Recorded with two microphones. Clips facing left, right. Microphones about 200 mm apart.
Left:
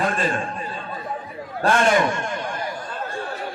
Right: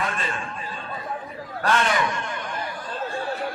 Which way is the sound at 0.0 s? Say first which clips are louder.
Left 6 dB; 35° left (ahead or behind).